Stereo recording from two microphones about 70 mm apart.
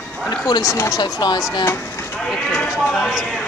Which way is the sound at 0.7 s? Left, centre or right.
Left.